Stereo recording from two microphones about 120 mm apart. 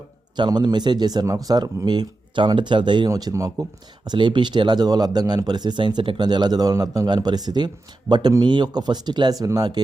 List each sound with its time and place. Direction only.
0.3 s speech: 35° right (ahead or behind)
3.1 s speech: 30° right (ahead or behind)